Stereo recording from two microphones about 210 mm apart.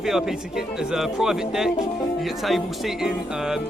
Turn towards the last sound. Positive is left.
turn(degrees=0)  # may be behind; listen again after turning